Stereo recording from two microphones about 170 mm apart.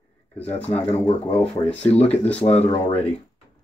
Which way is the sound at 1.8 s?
35° left (ahead or behind).